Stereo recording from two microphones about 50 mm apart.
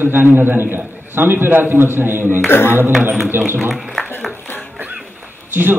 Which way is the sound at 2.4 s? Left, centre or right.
Left.